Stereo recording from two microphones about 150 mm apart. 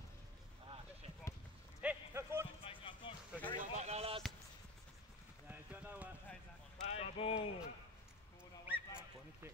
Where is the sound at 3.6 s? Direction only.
50° right (ahead or behind).